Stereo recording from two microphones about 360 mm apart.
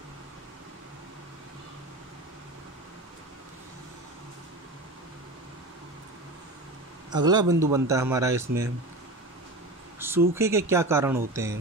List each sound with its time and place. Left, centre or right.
7.1 s speech: centre
9.9 s speech: centre